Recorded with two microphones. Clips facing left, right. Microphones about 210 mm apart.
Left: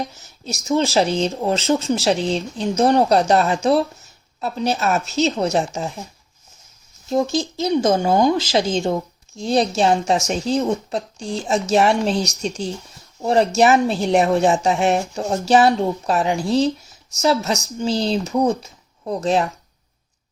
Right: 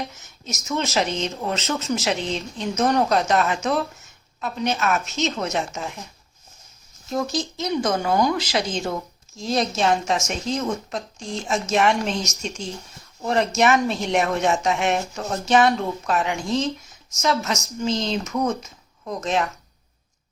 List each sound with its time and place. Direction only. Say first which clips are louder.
0.1 s speech: left 4 dB; 35° left (ahead or behind)
7.5 s speech: left 6 dB; 30° left (ahead or behind)